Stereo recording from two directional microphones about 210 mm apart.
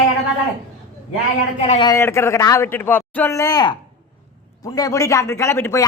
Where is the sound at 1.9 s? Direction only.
10° left (ahead or behind).